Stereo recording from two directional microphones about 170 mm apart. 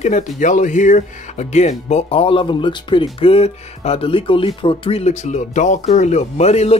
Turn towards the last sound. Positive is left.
turn(degrees=40)  # may be behind; listen again after turning